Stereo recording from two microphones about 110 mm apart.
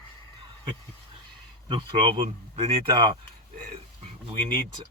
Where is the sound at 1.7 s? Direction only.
50° right (ahead or behind).